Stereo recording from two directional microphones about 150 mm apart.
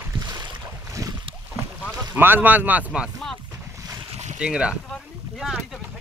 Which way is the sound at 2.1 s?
10° right (ahead or behind).